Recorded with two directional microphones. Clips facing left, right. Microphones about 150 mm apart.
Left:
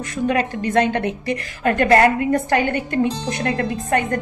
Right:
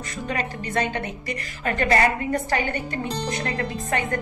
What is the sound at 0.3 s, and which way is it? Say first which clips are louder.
Speech: left 7 dB; 60° left (ahead or behind).